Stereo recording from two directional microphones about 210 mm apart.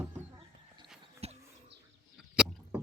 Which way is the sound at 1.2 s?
30° right (ahead or behind).